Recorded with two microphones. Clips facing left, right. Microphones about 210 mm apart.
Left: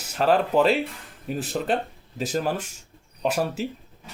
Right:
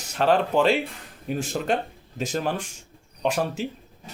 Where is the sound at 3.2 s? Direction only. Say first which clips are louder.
Even; 5° left (ahead or behind).